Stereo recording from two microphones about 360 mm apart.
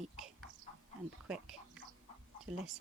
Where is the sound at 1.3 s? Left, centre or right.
Centre.